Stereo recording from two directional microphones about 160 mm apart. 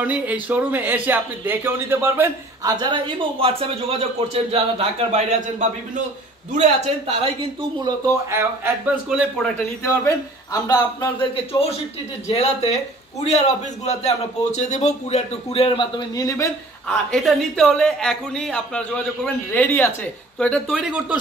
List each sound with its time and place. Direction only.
0.0 s speech: 10° right (ahead or behind)
2.8 s a man's voice: 30° right (ahead or behind)
7.8 s speech: 15° right (ahead or behind)
10.0 s a man's voice: 25° left (ahead or behind)
16.8 s a woman's voice: 5° left (ahead or behind)
20.7 s speech: 5° right (ahead or behind)